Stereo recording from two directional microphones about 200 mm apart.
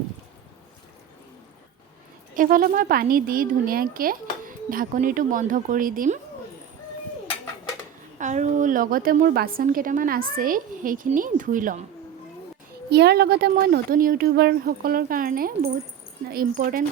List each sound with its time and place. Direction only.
2.3 s speech: 45° right (ahead or behind)
8.2 s speech: 35° right (ahead or behind)
12.9 s speech: 55° right (ahead or behind)